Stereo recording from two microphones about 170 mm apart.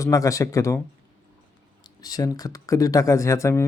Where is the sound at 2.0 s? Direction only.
20° left (ahead or behind).